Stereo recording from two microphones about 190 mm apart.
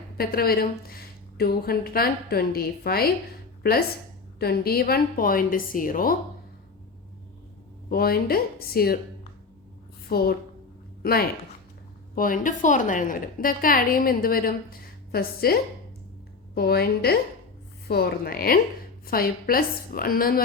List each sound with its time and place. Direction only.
0.2 s a woman's voice: 50° left (ahead or behind)
7.9 s a woman's voice: 55° left (ahead or behind)
10.1 s a woman's voice: 55° left (ahead or behind)
16.6 s a woman's voice: 55° left (ahead or behind)